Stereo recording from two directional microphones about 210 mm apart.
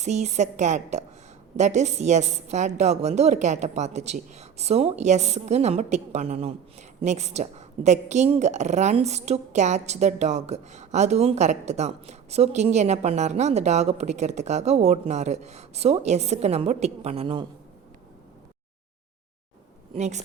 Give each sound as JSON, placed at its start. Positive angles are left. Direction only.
{"t": 0.0, "sound": "a woman's voice", "side_deg": -35}
{"t": 19.9, "sound": "a woman's voice", "side_deg": -35}